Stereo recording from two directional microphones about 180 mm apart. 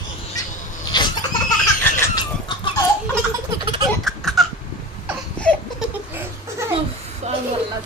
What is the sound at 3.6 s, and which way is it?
Baby laughter, 25° right (ahead or behind).